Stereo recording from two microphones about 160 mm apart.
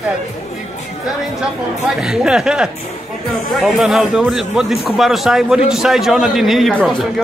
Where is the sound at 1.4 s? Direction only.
5° right (ahead or behind).